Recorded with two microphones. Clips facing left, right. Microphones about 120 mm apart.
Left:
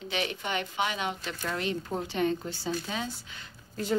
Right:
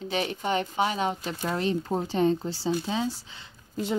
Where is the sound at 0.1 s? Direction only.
35° right (ahead or behind).